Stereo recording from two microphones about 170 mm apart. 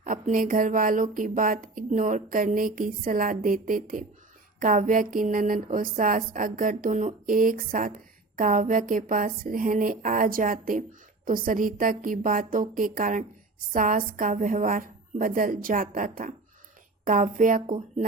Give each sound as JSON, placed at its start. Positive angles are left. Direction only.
{"t": 0.0, "sound": "a woman's voice", "side_deg": -50}
{"t": 17.7, "sound": "speech", "side_deg": -35}